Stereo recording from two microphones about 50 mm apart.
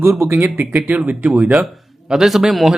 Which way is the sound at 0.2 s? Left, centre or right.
Right.